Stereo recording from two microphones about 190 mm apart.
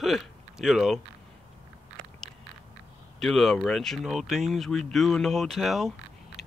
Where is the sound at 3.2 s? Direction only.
Centre (ahead or behind).